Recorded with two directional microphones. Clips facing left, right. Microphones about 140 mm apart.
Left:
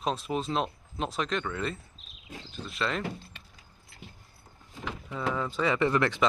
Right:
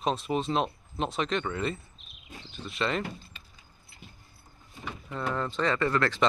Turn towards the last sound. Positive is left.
turn(degrees=20)  # may be behind; listen again after turning